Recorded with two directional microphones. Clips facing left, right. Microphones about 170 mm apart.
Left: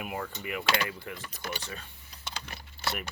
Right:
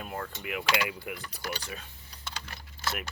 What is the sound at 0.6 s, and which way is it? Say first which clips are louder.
Speech: even; 10° right (ahead or behind).